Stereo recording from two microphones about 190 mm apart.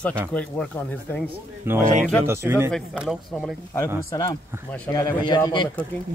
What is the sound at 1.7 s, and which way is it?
Speech, 10° right (ahead or behind).